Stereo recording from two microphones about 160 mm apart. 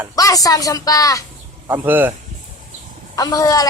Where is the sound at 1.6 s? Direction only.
15° right (ahead or behind).